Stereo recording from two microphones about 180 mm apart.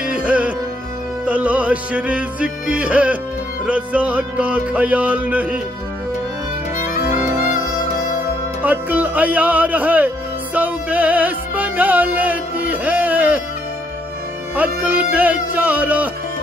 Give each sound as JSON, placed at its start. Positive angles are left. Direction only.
{"t": 0.0, "sound": "music", "side_deg": -5}
{"t": 6.8, "sound": "music", "side_deg": 45}
{"t": 8.6, "sound": "speech", "side_deg": -10}
{"t": 14.5, "sound": "music", "side_deg": -10}